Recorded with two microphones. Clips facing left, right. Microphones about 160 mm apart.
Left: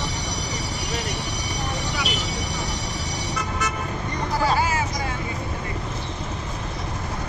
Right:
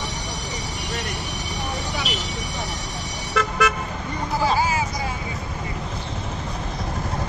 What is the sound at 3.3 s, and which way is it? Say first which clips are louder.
Toot: right 9 dB; 90° right.